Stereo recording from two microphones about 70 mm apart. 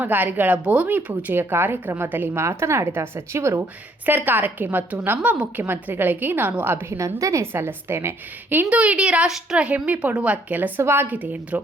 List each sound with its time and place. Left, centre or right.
0.0 s a woman's voice: right
4.0 s speech: right
5.6 s speech: right
7.2 s a woman's voice: right
8.7 s a woman's voice: centre
9.6 s speech: right